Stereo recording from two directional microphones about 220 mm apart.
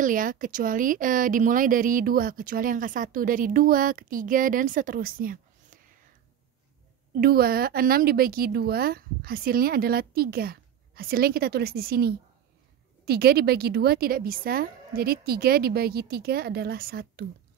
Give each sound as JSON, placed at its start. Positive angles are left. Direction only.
{"t": 0.0, "sound": "speech", "side_deg": -40}
{"t": 7.2, "sound": "a woman's voice", "side_deg": -45}